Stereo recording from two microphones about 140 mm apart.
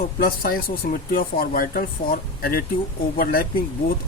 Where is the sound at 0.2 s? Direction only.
90° left.